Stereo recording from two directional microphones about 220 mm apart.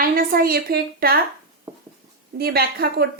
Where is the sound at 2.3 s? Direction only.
45° right (ahead or behind).